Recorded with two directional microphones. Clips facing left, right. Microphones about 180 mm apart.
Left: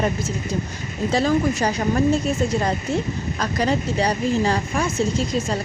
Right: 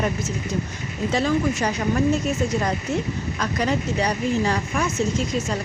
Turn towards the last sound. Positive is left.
turn(degrees=30)  # may be behind; listen again after turning